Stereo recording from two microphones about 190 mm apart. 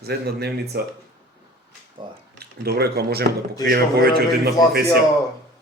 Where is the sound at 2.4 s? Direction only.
55° right (ahead or behind).